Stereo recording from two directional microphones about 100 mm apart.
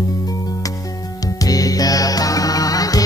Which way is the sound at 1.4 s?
35° left (ahead or behind).